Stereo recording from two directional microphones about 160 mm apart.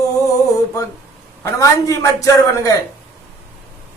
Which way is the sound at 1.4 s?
20° left (ahead or behind).